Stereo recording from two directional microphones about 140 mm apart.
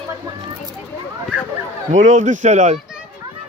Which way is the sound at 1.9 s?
60° right (ahead or behind).